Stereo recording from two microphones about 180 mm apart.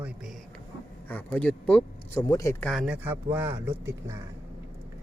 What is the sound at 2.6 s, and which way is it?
Speech, centre (ahead or behind).